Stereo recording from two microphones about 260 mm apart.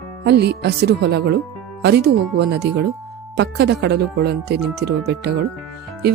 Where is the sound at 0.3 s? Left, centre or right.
Right.